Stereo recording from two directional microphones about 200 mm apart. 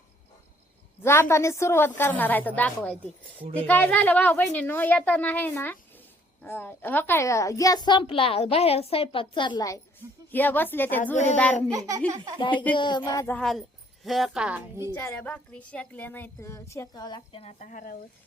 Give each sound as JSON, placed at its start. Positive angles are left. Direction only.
{"t": 1.0, "sound": "a child's voice", "side_deg": 10}
{"t": 11.0, "sound": "speech", "side_deg": 35}
{"t": 11.7, "sound": "speech", "side_deg": -15}
{"t": 12.7, "sound": "a child's voice", "side_deg": 25}
{"t": 13.3, "sound": "a woman's voice", "side_deg": 0}
{"t": 14.9, "sound": "speech", "side_deg": 10}